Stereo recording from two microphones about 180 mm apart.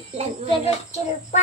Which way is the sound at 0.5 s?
35° left (ahead or behind).